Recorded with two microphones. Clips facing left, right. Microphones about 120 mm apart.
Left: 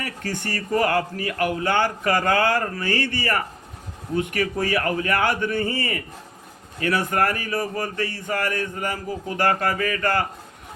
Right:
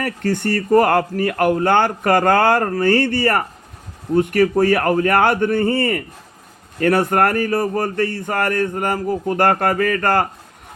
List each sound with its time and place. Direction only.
0.0 s speech: 45° right (ahead or behind)